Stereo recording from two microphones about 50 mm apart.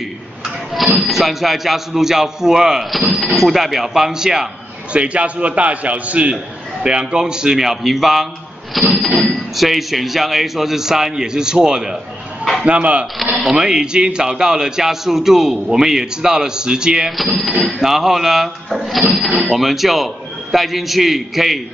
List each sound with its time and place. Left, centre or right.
0.9 s a man's voice: centre
4.9 s a man's voice: right; by 8.3 s centre
8.9 s a sound: centre
9.6 s speech: centre
12.6 s a man's voice: right
13.2 s speech: centre
17.4 s a man's voice: centre